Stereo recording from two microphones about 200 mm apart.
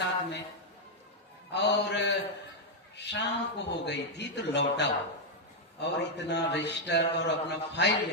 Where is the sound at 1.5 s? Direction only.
60° left (ahead or behind).